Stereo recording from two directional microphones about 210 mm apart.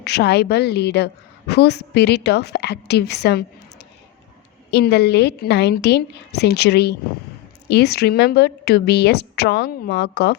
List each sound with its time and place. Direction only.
0.0 s a woman's voice: 50° left (ahead or behind)